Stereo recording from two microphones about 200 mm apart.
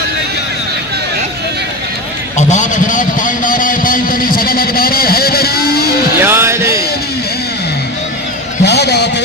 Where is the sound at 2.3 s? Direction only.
35° left (ahead or behind).